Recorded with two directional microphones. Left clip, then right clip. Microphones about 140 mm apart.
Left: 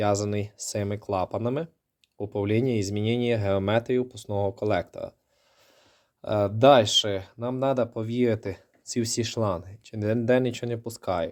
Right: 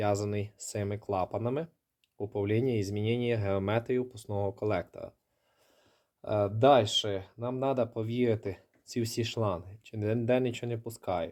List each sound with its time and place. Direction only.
0.0 s speech: 25° left (ahead or behind)
6.2 s speech: 30° left (ahead or behind)